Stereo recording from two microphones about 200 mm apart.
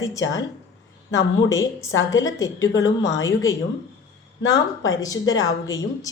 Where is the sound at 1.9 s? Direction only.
75° left (ahead or behind).